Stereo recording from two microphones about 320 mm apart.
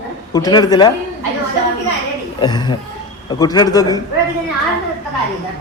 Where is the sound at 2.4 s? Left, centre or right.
Centre.